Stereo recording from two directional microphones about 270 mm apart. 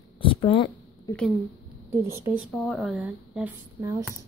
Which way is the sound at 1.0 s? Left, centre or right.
Centre.